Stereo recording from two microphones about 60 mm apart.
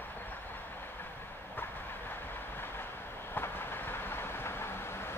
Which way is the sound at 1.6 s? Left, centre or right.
Left.